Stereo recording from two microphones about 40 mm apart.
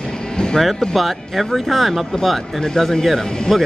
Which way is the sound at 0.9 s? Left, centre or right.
Centre.